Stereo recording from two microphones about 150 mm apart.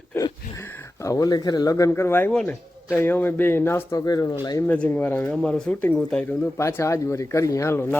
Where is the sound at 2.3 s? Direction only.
10° left (ahead or behind); by 4.6 s 30° left (ahead or behind).